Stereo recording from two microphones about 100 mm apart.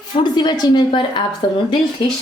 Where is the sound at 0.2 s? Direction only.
45° left (ahead or behind).